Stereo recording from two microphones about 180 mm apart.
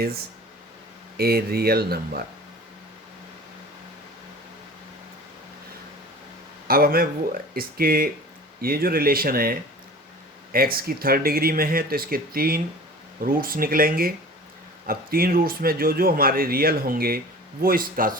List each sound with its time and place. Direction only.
1.1 s speech: 60° right (ahead or behind)
6.7 s a man's voice: 55° right (ahead or behind)